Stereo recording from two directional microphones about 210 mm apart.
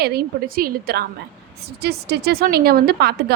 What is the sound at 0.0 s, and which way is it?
A woman's voice, 50° right (ahead or behind).